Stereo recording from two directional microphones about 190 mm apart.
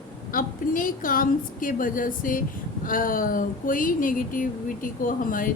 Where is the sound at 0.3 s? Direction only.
45° left (ahead or behind).